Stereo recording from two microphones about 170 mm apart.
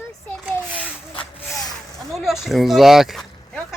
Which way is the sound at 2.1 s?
Centre (ahead or behind).